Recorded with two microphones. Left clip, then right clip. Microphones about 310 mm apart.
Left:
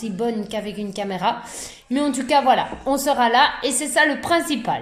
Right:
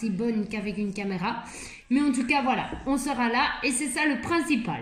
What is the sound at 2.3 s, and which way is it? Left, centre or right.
A woman's voice, centre.